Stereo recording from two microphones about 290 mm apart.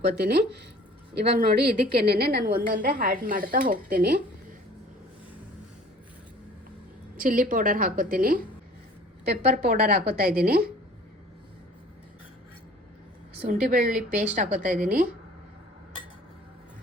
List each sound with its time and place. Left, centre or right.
0.0 s a woman's voice: right
7.2 s a woman's voice: right
13.4 s a woman's voice: right